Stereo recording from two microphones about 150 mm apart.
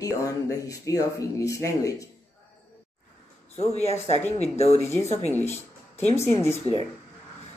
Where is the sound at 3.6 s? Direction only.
45° left (ahead or behind).